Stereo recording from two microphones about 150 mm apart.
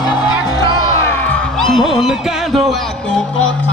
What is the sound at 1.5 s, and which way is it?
Speech, centre (ahead or behind).